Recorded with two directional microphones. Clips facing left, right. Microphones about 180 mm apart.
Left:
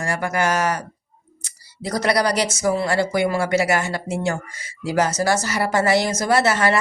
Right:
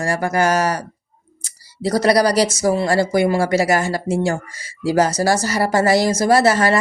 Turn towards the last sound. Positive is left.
turn(degrees=-35)  # may be behind; listen again after turning